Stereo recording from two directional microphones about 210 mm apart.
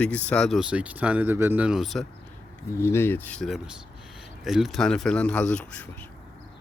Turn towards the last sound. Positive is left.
turn(degrees=5)  # may be behind; listen again after turning